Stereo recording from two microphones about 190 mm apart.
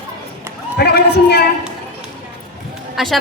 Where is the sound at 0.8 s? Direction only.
60° left (ahead or behind).